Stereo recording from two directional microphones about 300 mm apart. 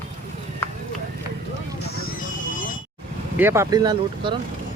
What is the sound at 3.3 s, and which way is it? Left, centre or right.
Speech, centre.